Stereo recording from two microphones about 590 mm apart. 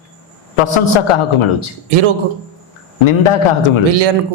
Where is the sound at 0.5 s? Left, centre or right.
Left.